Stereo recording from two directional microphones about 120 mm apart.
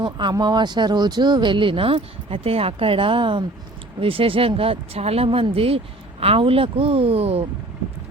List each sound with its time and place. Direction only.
0.0 s speech: 40° right (ahead or behind); by 7.4 s 55° right (ahead or behind)